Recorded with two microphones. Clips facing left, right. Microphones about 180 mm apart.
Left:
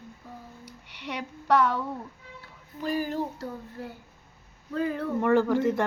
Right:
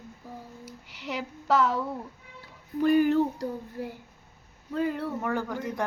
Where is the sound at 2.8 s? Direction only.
60° right (ahead or behind).